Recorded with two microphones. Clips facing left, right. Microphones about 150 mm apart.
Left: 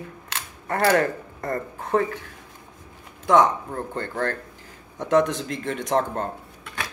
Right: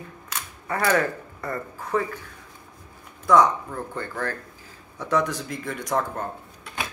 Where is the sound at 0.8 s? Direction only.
35° left (ahead or behind).